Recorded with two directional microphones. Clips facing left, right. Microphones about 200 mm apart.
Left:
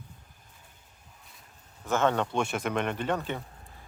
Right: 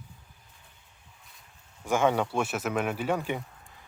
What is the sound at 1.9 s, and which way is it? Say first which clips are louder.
Speech: right 1 dB; 10° right (ahead or behind).